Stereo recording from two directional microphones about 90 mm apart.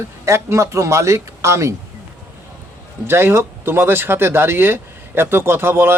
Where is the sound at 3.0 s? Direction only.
25° right (ahead or behind).